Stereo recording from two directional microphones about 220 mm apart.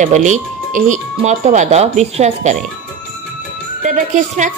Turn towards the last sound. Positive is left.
turn(degrees=-35)  # may be behind; listen again after turning